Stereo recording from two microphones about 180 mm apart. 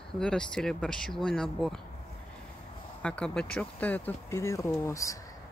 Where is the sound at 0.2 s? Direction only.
5° left (ahead or behind).